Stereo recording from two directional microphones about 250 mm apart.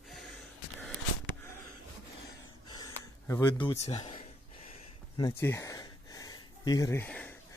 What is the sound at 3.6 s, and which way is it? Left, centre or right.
Speech, centre.